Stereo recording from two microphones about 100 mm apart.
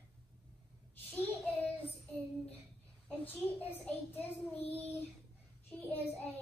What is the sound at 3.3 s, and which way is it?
A child's voice, 15° left (ahead or behind).